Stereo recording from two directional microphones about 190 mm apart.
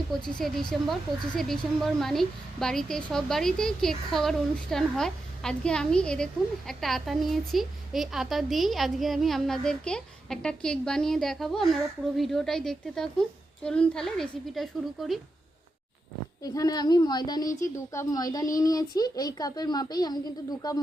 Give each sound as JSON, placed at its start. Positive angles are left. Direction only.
{"t": 0.1, "sound": "a woman's voice", "side_deg": 0}
{"t": 16.4, "sound": "a woman's voice", "side_deg": 20}